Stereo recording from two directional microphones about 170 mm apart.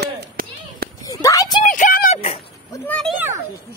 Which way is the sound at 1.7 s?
50° left (ahead or behind).